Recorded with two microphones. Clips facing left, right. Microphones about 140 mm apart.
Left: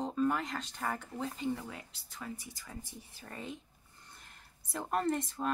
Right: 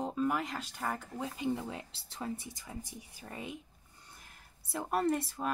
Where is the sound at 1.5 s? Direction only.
20° right (ahead or behind).